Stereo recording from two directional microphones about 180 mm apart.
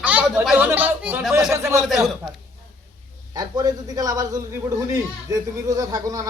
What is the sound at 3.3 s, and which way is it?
Speech, 20° right (ahead or behind).